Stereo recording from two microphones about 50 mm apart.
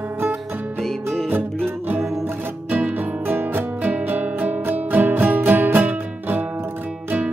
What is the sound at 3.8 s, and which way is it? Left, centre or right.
Music, right.